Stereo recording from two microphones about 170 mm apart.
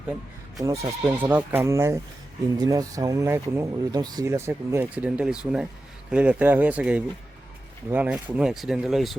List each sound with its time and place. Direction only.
0.6 s speech: 15° right (ahead or behind); by 9.1 s centre (ahead or behind)